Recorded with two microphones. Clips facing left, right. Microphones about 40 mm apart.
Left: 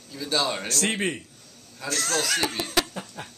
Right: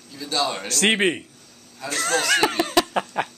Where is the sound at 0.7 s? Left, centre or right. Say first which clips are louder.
Right 9 dB; right.